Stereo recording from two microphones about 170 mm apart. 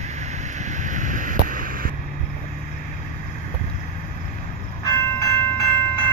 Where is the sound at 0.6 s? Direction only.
45° right (ahead or behind).